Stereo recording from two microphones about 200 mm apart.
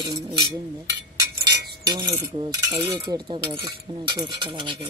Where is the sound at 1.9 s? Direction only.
20° right (ahead or behind).